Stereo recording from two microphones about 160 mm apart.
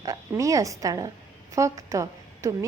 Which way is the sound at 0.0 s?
20° right (ahead or behind).